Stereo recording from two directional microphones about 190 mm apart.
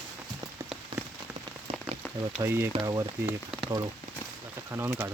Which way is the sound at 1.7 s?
30° right (ahead or behind).